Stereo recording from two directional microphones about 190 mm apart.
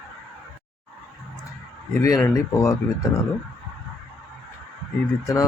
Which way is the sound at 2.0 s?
15° left (ahead or behind).